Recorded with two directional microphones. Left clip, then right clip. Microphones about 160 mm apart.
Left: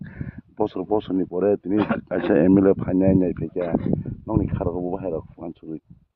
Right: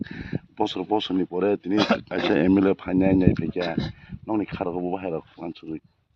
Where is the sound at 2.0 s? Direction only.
60° left (ahead or behind).